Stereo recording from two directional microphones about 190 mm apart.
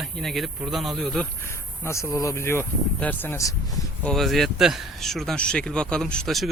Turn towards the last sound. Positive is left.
turn(degrees=0)  # may be behind; listen again after turning